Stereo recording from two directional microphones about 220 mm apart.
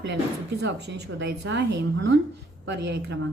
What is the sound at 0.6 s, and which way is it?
Speech, 50° right (ahead or behind).